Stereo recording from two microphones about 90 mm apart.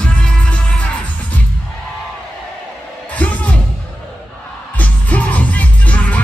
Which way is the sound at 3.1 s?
15° left (ahead or behind).